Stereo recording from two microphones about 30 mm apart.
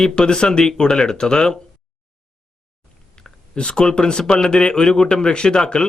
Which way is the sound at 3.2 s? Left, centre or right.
Left.